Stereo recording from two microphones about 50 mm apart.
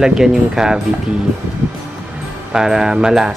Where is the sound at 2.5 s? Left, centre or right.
Centre.